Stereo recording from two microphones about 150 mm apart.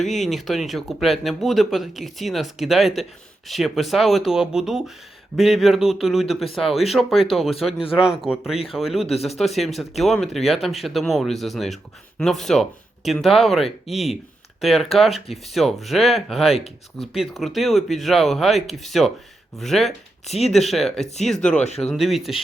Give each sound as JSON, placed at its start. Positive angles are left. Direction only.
{"t": 0.0, "sound": "speech", "side_deg": 0}
{"t": 20.2, "sound": "speech", "side_deg": 45}
{"t": 20.5, "sound": "speech", "side_deg": 0}